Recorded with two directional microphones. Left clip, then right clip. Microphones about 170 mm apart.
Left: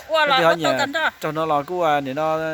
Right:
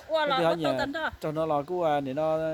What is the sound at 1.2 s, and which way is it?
Speech, 15° left (ahead or behind).